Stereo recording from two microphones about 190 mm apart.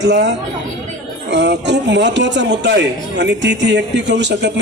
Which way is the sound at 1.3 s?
65° right (ahead or behind).